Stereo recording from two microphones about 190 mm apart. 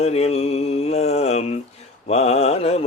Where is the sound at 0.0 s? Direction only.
35° left (ahead or behind).